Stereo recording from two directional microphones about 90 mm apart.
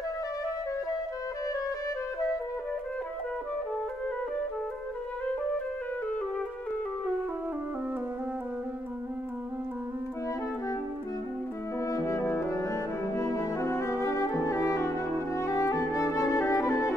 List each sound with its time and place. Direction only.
11.8 s french horn: 35° left (ahead or behind)
12.2 s music: 30° left (ahead or behind)